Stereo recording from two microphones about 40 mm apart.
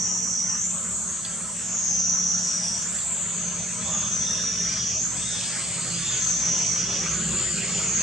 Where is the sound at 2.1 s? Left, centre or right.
Centre.